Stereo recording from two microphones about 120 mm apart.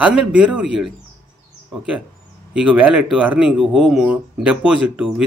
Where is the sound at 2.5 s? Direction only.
10° right (ahead or behind).